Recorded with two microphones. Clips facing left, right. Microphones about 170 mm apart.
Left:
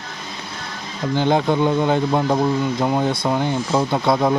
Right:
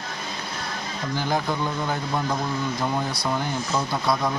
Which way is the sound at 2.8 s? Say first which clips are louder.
Left 7 dB; 25° left (ahead or behind).